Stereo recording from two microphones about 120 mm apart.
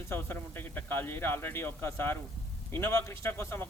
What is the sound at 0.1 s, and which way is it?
A man's voice, 15° left (ahead or behind).